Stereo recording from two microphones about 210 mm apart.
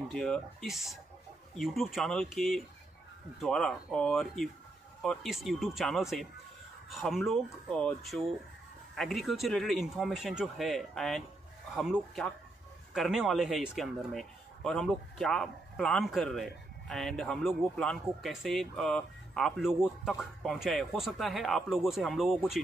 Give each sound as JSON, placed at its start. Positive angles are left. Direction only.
{"t": 0.1, "sound": "speech", "side_deg": 5}